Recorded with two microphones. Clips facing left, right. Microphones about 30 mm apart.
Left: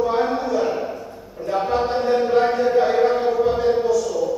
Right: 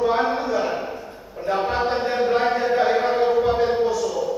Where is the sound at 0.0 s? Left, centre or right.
Right.